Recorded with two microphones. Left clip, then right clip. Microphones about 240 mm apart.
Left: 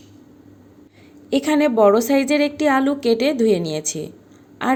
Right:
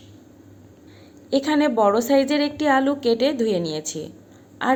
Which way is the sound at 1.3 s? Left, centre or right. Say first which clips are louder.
Left 2 dB; left.